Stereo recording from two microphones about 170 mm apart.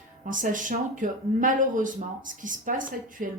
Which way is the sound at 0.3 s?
50° right (ahead or behind).